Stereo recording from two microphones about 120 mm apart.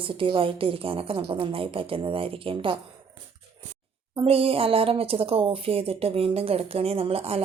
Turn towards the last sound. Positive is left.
turn(degrees=-55)  # may be behind; listen again after turning